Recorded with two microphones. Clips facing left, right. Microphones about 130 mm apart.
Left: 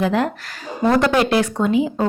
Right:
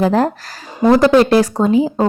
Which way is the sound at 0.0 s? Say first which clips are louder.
Right 5 dB; 40° right (ahead or behind).